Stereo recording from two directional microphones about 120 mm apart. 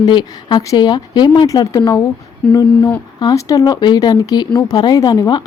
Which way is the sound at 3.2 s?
30° left (ahead or behind).